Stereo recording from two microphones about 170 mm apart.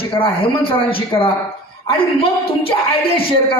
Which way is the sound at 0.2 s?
30° left (ahead or behind).